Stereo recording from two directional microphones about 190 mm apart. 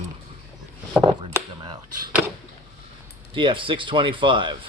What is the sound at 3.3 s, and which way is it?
Speech, 25° right (ahead or behind).